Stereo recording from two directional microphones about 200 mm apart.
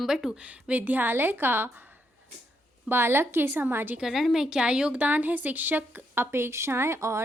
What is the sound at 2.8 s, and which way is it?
A woman's voice, 10° right (ahead or behind).